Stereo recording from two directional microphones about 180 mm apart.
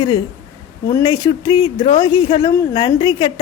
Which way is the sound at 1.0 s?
25° left (ahead or behind).